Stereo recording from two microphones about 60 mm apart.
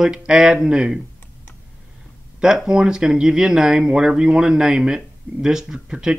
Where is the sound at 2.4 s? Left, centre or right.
Centre.